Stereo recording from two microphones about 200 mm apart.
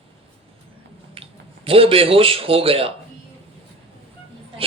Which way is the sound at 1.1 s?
30° right (ahead or behind).